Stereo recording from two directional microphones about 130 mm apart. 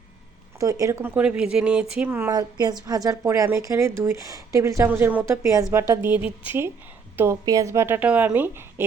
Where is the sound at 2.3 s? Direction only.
30° right (ahead or behind).